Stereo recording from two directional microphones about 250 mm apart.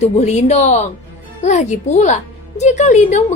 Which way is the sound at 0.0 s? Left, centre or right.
Left.